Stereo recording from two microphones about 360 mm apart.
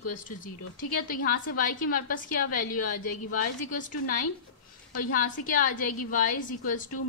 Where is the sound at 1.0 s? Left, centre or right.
Left.